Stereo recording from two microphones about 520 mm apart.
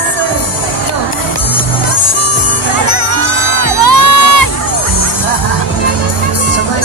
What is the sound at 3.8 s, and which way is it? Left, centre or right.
Music, left.